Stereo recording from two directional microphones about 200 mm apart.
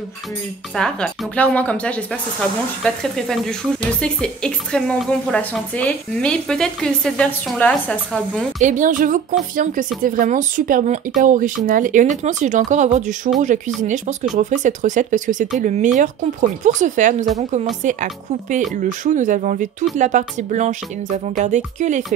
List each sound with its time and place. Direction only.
0.7 s a woman's voice: 5° left (ahead or behind)
8.5 s speech: 40° right (ahead or behind)